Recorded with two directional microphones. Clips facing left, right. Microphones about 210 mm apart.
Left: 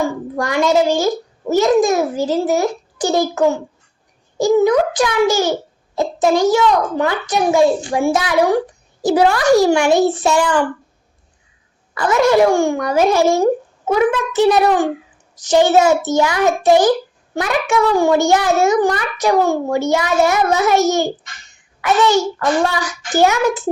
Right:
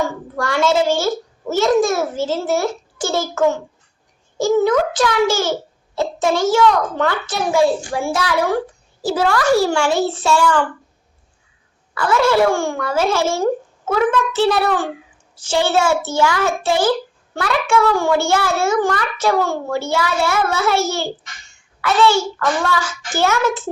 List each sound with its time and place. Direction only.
0.0 s a child's voice: 15° left (ahead or behind)
11.9 s a child's voice: 15° left (ahead or behind)